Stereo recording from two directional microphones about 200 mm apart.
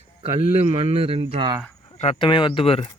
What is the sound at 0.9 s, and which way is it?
Speech, 25° right (ahead or behind).